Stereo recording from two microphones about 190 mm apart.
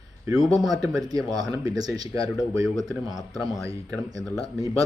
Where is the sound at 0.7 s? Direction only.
20° right (ahead or behind).